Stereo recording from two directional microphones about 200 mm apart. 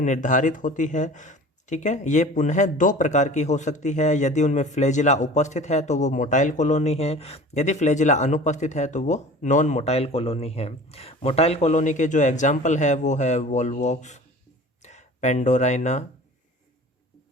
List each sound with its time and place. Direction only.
0.0 s speech: 40° left (ahead or behind)